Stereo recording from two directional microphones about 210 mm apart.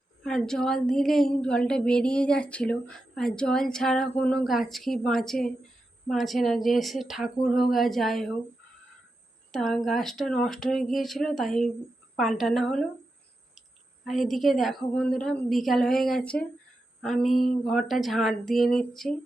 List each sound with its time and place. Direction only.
0.2 s speech: centre (ahead or behind)
9.5 s speech: centre (ahead or behind)